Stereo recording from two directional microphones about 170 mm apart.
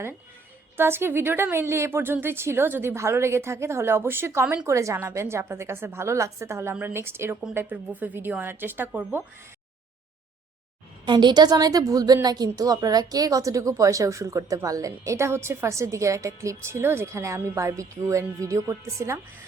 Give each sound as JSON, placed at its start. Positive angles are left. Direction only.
{"t": 0.8, "sound": "a woman's voice", "side_deg": -15}
{"t": 11.0, "sound": "a woman's voice", "side_deg": -25}